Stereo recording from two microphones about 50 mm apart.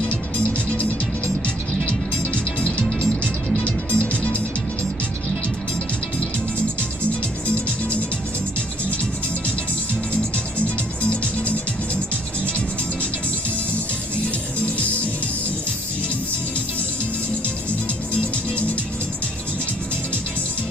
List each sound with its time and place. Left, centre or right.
0.1 s music: left